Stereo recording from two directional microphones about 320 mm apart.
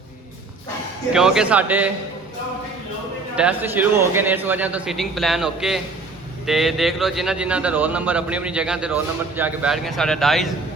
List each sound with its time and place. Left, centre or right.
1.1 s a man's voice: centre
3.3 s a man's voice: centre